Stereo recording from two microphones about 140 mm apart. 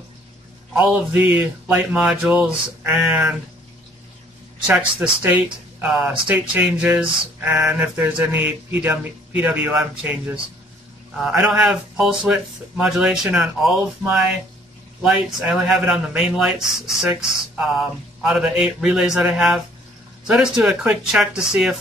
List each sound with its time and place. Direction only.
1.7 s speech: 10° right (ahead or behind)
4.6 s speech: 10° right (ahead or behind)